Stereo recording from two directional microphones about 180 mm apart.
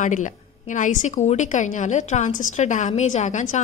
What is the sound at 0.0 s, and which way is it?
A woman's voice, 45° left (ahead or behind).